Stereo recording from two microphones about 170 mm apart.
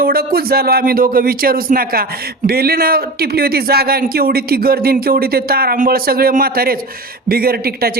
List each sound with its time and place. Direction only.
0.0 s speech: 65° right (ahead or behind)